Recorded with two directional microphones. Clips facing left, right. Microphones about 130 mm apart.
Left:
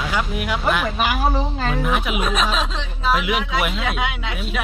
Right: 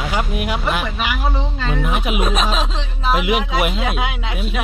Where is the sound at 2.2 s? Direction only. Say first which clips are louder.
Right 1 dB; 30° right (ahead or behind).